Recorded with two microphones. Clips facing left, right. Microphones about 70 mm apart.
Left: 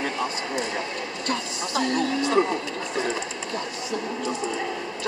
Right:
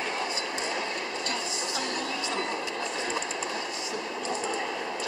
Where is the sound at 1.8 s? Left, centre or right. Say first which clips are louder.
Left 11 dB; left.